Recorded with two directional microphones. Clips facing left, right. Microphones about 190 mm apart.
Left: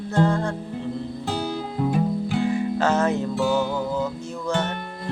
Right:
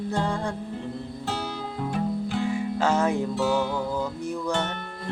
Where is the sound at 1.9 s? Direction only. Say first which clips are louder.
Left 3 dB; 15° left (ahead or behind).